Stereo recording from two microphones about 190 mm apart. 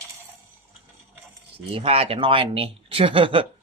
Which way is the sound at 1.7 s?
30° right (ahead or behind).